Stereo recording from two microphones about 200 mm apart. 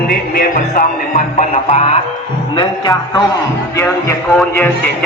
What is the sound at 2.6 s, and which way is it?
Speech, 20° left (ahead or behind).